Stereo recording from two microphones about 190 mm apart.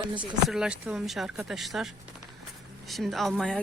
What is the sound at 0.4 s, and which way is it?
Speech, 5° right (ahead or behind).